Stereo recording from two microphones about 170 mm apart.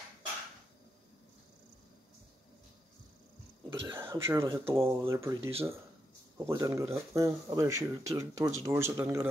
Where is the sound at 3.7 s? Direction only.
15° right (ahead or behind).